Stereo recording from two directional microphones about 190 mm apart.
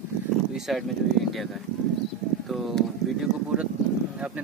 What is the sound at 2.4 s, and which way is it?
Speech, centre (ahead or behind).